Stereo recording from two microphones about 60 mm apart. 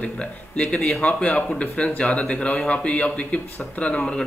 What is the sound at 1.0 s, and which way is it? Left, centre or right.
Speech, centre.